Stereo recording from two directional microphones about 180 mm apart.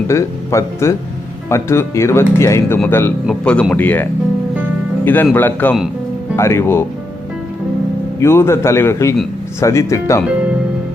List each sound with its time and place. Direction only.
0.1 s speech: 15° left (ahead or behind)
8.2 s speech: 15° left (ahead or behind)